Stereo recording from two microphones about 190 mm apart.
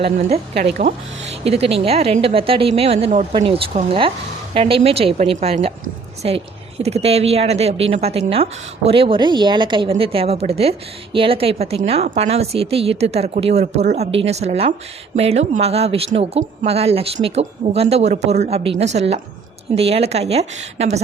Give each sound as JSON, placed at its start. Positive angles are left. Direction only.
{"t": 0.0, "sound": "a woman's voice", "side_deg": -35}
{"t": 0.5, "sound": "speech", "side_deg": -60}
{"t": 1.3, "sound": "a woman's voice", "side_deg": -35}